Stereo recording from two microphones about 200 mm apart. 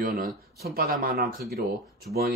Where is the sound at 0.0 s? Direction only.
45° right (ahead or behind).